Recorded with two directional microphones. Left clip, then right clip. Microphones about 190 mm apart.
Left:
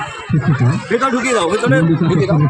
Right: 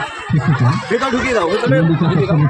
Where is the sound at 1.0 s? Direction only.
30° left (ahead or behind).